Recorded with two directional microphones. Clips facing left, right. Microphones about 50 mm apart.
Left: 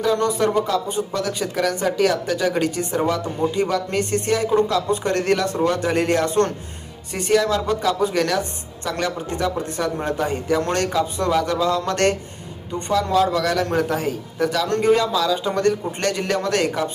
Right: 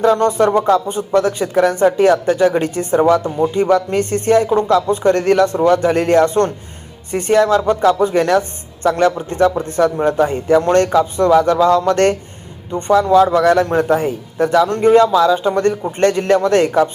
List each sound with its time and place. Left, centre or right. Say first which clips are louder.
0.0 s speech: right 6 dB; right